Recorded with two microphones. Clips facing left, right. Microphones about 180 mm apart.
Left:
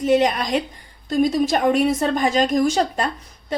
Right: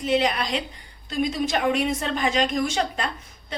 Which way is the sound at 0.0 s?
45° left (ahead or behind).